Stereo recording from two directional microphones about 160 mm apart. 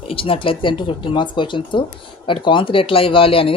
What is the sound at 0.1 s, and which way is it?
Speech, 35° left (ahead or behind).